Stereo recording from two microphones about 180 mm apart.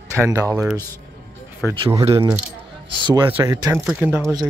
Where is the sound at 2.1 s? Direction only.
25° right (ahead or behind).